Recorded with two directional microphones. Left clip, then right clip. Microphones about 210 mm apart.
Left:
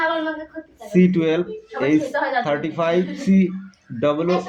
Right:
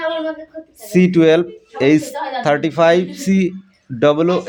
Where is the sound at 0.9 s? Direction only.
50° right (ahead or behind).